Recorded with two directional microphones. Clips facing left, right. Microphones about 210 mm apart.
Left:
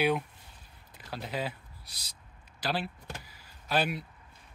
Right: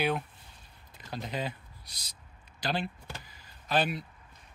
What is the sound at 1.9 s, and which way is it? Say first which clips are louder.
Owl: even; 30° left (ahead or behind).